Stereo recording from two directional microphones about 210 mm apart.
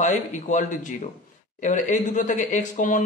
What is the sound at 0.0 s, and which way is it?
Speech, 35° left (ahead or behind).